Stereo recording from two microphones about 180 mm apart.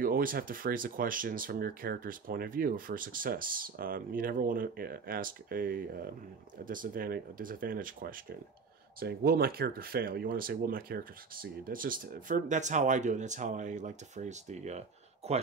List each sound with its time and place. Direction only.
0.0 s speech: 50° right (ahead or behind)